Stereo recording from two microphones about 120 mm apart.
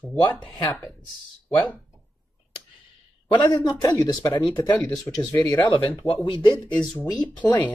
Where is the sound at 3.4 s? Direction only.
30° left (ahead or behind).